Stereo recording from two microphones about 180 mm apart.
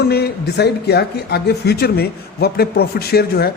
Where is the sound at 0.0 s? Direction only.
65° left (ahead or behind).